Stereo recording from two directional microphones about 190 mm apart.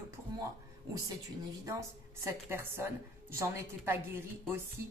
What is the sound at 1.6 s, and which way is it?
Speech, 15° right (ahead or behind).